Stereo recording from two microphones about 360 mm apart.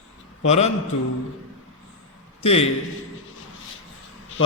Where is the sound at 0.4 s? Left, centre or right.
Centre.